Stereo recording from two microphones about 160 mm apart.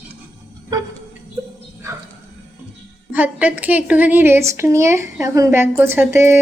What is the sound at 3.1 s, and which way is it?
A woman's voice, 10° right (ahead or behind).